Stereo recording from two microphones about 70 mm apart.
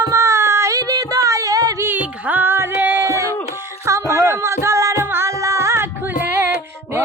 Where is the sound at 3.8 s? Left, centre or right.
Right.